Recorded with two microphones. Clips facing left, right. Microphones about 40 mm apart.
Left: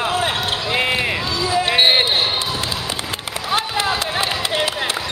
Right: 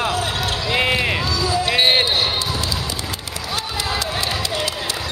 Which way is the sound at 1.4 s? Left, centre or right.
Left.